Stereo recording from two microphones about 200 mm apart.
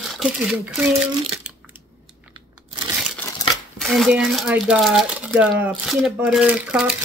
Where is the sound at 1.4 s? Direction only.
5° right (ahead or behind).